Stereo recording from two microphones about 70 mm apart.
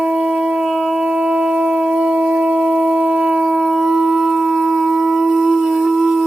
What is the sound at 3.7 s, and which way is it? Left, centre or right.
Shofar, centre.